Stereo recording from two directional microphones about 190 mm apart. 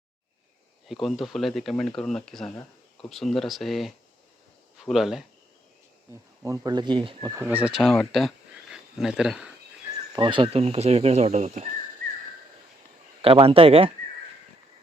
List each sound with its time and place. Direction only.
1.0 s speech: centre (ahead or behind)
6.4 s speech: 15° right (ahead or behind)
7.4 s speech: 5° right (ahead or behind)
10.1 s speech: 25° right (ahead or behind)
13.2 s speech: 30° right (ahead or behind)